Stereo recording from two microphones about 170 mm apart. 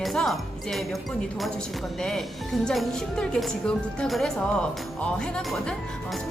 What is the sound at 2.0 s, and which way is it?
Speech, centre (ahead or behind).